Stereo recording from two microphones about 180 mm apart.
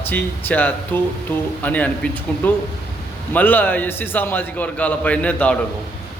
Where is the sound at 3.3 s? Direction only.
10° left (ahead or behind).